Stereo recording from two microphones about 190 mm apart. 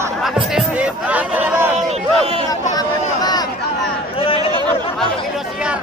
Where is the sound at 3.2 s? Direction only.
20° left (ahead or behind).